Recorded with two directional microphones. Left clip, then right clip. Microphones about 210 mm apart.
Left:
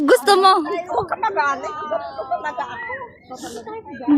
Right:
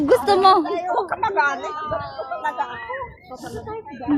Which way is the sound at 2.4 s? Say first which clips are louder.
Right 1 dB; 30° left (ahead or behind).